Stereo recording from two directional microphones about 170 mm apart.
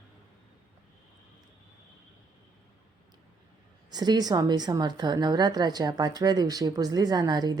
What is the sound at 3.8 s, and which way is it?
A woman's voice, 25° right (ahead or behind).